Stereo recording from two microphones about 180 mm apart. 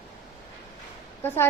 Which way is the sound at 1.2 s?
10° left (ahead or behind).